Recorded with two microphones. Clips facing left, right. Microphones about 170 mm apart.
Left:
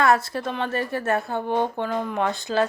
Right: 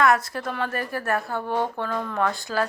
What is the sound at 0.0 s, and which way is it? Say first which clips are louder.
A woman's voice: left 1 dB; 30° left (ahead or behind).